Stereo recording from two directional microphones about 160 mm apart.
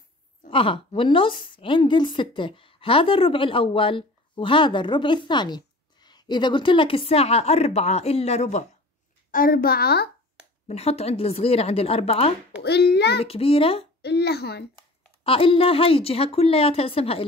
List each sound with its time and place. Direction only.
0.5 s a woman's voice: 35° left (ahead or behind)
9.3 s a child's voice: 65° left (ahead or behind)
10.7 s a woman's voice: 40° left (ahead or behind)
12.6 s a child's voice: 90° left
13.2 s a woman's voice: 35° left (ahead or behind)
14.0 s a child's voice: 90° left
15.2 s a woman's voice: 35° left (ahead or behind)